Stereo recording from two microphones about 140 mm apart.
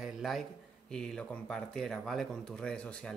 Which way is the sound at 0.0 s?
Centre (ahead or behind).